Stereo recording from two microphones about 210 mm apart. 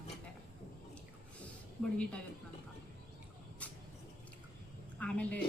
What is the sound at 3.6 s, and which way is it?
Vehicle, 5° left (ahead or behind).